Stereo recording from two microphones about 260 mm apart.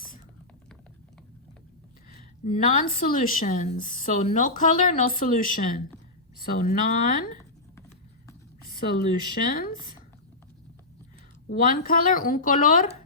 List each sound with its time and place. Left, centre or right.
2.4 s a woman's voice: left
8.6 s speech: left
11.4 s speech: left